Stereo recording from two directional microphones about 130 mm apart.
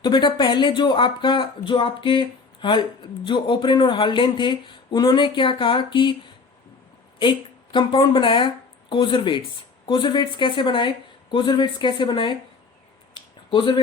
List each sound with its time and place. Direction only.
0.0 s speech: 35° left (ahead or behind)
7.2 s a woman's voice: 35° left (ahead or behind)
13.1 s a sound: 35° left (ahead or behind)